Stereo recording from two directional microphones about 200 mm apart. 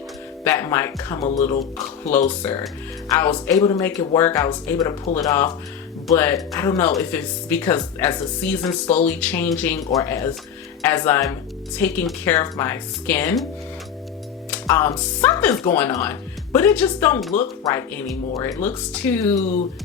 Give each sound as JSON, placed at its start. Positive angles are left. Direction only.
{"t": 0.4, "sound": "speech", "side_deg": 10}
{"t": 14.5, "sound": "speech", "side_deg": 15}
{"t": 19.4, "sound": "speech", "side_deg": 35}